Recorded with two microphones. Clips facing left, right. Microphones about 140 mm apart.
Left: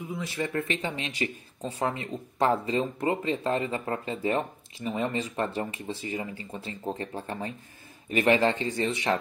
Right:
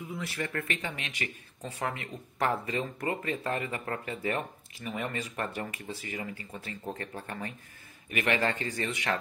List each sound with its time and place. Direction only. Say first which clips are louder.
0.1 s speech: left 5 dB; 20° left (ahead or behind)
0.8 s speech: left 6 dB; 30° left (ahead or behind)